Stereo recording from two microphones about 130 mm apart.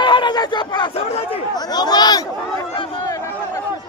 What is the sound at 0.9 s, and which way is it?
Speech, 55° left (ahead or behind).